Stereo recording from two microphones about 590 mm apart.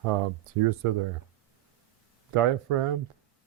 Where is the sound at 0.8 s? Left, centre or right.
Right.